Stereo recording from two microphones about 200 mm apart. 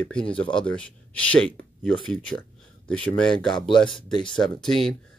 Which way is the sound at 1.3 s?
5° left (ahead or behind).